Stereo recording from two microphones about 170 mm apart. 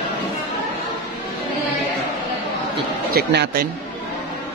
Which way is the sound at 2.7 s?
70° right (ahead or behind).